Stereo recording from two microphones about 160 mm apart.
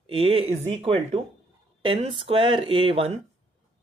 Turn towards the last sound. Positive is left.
turn(degrees=-35)  # may be behind; listen again after turning